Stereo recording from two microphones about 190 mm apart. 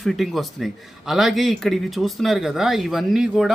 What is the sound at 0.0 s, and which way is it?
A man's voice, centre (ahead or behind).